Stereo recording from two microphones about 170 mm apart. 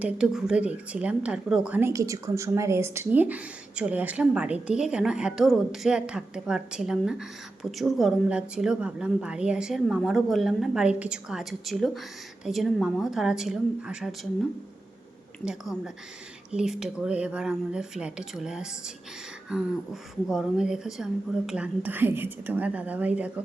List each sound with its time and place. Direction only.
0.0 s a woman's voice: 5° right (ahead or behind)
15.4 s a woman's voice: 5° right (ahead or behind)